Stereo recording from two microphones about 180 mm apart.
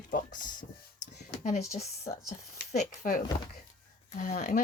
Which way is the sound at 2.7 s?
50° left (ahead or behind).